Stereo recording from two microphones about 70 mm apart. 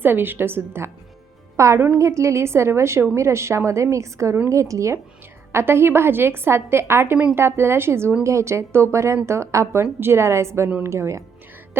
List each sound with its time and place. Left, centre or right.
0.0 s a woman's voice: right
1.5 s a woman's voice: right
5.5 s a woman's voice: right
9.8 s a woman's voice: right